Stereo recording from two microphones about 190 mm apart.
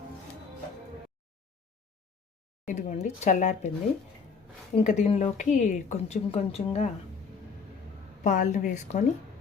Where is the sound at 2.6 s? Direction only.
40° left (ahead or behind).